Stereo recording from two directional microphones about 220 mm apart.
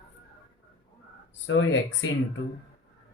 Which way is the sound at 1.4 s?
55° left (ahead or behind).